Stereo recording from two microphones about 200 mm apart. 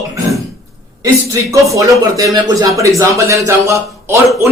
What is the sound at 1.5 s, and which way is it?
Speech, 15° right (ahead or behind).